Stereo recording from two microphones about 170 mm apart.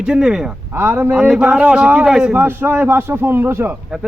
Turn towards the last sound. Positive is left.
turn(degrees=-15)  # may be behind; listen again after turning